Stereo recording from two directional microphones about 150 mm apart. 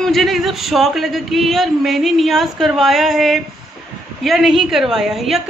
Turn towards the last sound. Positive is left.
turn(degrees=0)  # may be behind; listen again after turning